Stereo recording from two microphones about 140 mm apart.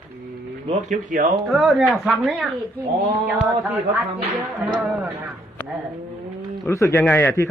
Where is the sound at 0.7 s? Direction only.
55° right (ahead or behind); by 1.3 s 80° right.